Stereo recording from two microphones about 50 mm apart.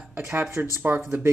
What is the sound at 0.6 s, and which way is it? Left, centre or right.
Speech, right.